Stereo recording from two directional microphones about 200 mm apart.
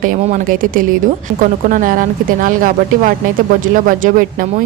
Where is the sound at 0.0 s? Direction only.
40° right (ahead or behind).